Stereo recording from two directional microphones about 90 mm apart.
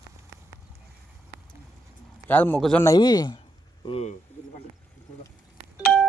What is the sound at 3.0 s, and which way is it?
Speech, 50° left (ahead or behind).